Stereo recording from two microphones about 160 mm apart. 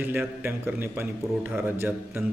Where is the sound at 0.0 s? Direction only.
10° right (ahead or behind).